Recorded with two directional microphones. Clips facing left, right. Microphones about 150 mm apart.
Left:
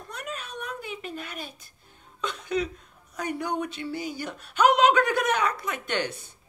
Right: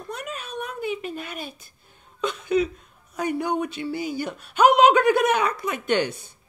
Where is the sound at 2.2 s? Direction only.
10° right (ahead or behind).